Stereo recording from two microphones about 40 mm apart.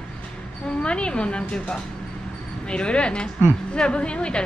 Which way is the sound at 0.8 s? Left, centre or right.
Left.